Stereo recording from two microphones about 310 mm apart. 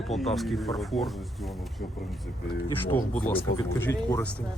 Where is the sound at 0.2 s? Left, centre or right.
Centre.